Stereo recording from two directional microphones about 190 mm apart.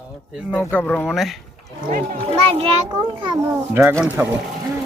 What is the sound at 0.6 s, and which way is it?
Speech, 10° left (ahead or behind).